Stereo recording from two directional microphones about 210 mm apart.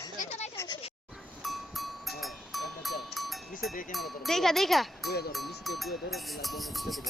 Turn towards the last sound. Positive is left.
turn(degrees=0)  # may be behind; listen again after turning